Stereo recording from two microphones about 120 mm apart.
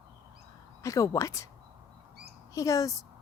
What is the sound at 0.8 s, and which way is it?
Speech, 25° left (ahead or behind).